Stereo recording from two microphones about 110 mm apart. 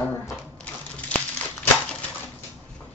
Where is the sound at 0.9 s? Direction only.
10° left (ahead or behind).